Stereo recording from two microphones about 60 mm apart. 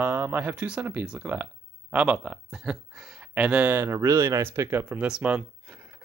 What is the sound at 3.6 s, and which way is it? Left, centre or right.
Speech, right.